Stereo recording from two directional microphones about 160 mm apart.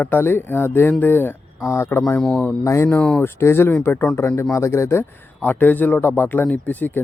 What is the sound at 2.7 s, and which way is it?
Speech, 15° left (ahead or behind).